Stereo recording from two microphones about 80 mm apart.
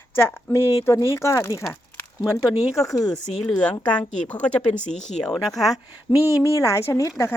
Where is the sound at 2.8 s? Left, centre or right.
Left.